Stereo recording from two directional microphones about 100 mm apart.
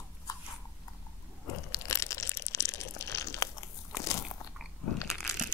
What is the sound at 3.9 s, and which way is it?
Biting, 30° left (ahead or behind).